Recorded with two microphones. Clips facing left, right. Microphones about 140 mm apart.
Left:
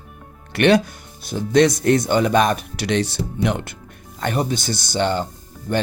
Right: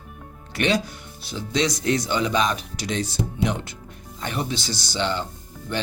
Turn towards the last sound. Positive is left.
turn(degrees=45)  # may be behind; listen again after turning